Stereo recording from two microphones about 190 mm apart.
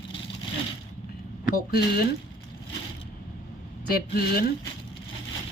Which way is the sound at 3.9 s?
55° left (ahead or behind).